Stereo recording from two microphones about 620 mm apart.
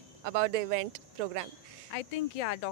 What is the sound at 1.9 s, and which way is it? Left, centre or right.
Speech, left.